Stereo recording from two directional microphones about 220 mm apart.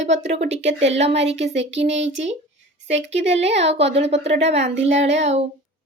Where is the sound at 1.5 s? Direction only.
55° right (ahead or behind).